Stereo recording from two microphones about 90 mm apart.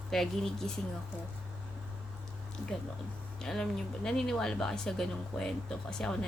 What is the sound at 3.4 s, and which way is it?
Speech, 5° left (ahead or behind).